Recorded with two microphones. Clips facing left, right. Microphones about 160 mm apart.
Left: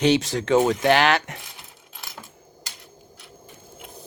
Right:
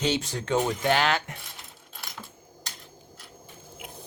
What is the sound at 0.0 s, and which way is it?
Speech, 80° left.